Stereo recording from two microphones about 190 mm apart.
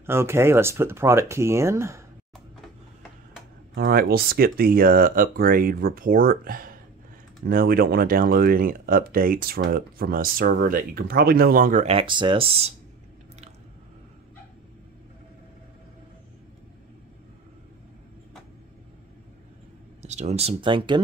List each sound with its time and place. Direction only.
0.0 s speech: 15° right (ahead or behind)
3.7 s speech: 50° right (ahead or behind); by 12.7 s 30° right (ahead or behind)
20.0 s speech: 35° right (ahead or behind)